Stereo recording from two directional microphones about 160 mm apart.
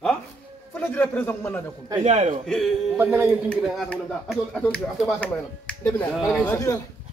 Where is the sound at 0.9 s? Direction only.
10° left (ahead or behind).